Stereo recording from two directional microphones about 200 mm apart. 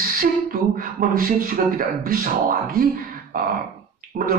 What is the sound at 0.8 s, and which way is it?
Speech, 45° right (ahead or behind).